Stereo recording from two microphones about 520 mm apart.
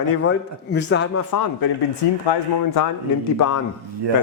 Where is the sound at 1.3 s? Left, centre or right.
Left.